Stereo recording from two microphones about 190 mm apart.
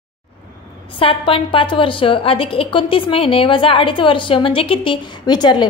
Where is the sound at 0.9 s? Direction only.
30° left (ahead or behind).